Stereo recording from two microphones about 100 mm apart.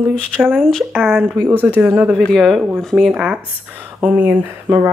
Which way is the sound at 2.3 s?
5° left (ahead or behind).